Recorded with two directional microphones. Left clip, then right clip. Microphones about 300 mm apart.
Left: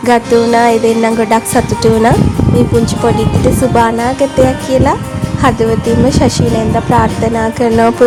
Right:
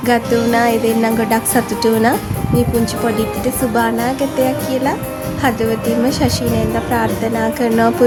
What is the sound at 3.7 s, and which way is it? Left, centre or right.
Speech, right.